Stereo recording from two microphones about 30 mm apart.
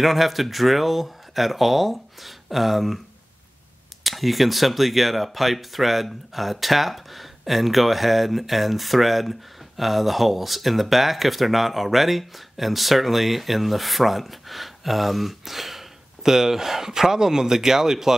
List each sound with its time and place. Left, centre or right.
0.0 s speech: centre
4.0 s speech: centre